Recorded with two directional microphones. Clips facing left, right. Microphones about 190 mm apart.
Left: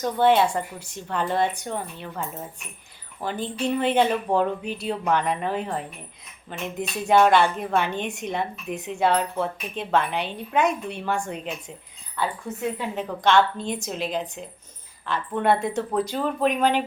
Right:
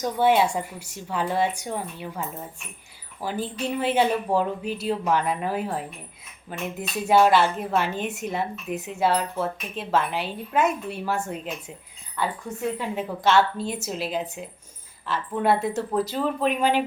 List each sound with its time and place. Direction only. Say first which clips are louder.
0.0 s speech: left 1 dB; 10° right (ahead or behind)
13.0 s speech: left 1 dB; 5° right (ahead or behind)